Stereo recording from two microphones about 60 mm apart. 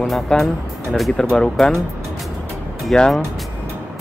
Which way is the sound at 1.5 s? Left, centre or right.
Centre.